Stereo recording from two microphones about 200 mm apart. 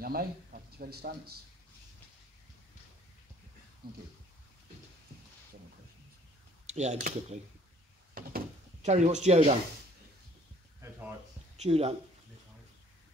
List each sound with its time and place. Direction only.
0.0 s speech: 50° right (ahead or behind)
3.8 s speech: 50° right (ahead or behind)
6.7 s speech: 35° right (ahead or behind)
8.2 s door: 45° right (ahead or behind)
8.8 s speech: 35° right (ahead or behind)
11.5 s speech: 30° right (ahead or behind)